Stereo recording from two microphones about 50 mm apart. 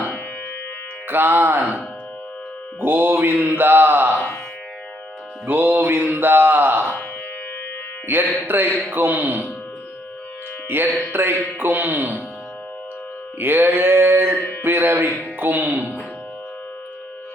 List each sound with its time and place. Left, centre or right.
1.0 s mantra: right
2.8 s mantra: right
5.5 s music: right
8.0 s music: right
8.4 s mantra: right
8.9 s a man's voice: right
10.7 s mantra: right
11.6 s a man's voice: right
13.4 s a sound: right
14.6 s mantra: right
15.4 s a man's voice: right